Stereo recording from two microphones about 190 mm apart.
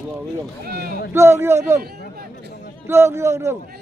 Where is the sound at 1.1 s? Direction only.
15° right (ahead or behind).